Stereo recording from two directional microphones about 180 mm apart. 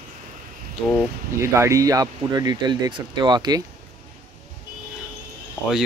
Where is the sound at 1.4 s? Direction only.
15° right (ahead or behind).